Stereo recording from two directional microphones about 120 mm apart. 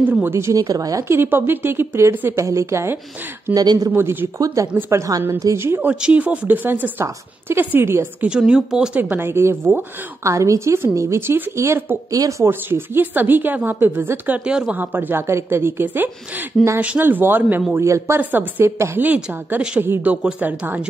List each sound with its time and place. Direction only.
0.1 s speech: 20° right (ahead or behind)
3.5 s speech: 30° right (ahead or behind)
3.9 s a woman's voice: 20° right (ahead or behind)
8.3 s a woman's voice: 5° right (ahead or behind)